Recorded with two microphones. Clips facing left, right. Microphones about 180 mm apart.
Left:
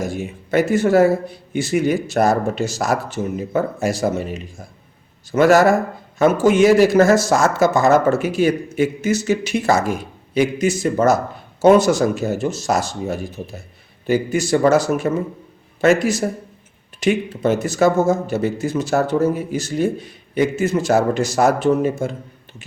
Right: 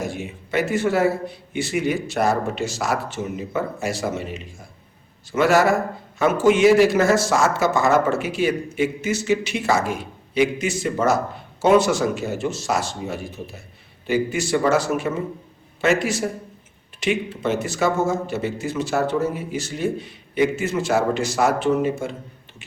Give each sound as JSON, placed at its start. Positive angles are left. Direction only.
{"t": 0.0, "sound": "a man's voice", "side_deg": 40}